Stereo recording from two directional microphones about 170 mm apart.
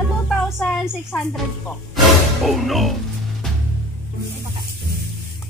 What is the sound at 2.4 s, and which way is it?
Speech, centre (ahead or behind).